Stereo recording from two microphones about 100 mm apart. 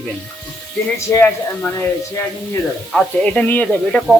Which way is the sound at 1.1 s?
15° left (ahead or behind).